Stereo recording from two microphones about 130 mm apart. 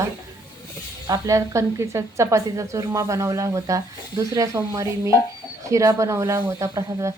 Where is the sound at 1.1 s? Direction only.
25° right (ahead or behind).